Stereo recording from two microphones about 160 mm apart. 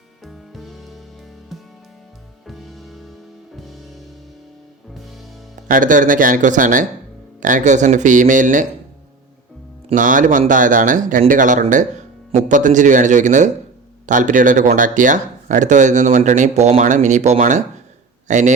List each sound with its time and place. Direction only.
0.3 s music: centre (ahead or behind)
2.5 s music: centre (ahead or behind)
5.6 s speech: 55° right (ahead or behind)
9.9 s speech: 55° right (ahead or behind)